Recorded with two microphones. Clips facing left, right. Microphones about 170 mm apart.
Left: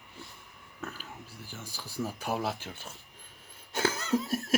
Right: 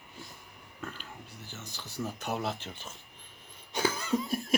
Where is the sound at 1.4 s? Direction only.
10° left (ahead or behind).